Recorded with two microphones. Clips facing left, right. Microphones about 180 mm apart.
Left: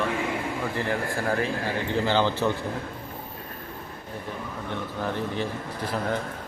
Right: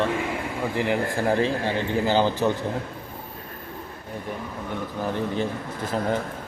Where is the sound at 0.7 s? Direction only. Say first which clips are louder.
Right 7 dB; 15° right (ahead or behind).